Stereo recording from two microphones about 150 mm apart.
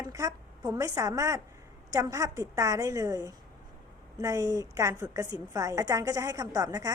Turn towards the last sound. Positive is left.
turn(degrees=-25)  # may be behind; listen again after turning